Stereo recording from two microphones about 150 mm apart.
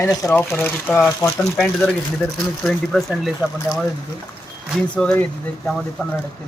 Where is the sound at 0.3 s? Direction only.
10° left (ahead or behind).